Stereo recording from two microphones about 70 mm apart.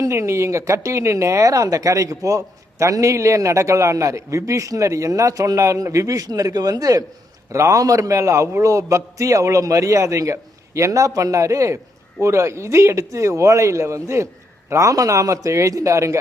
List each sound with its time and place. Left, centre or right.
0.0 s speech: right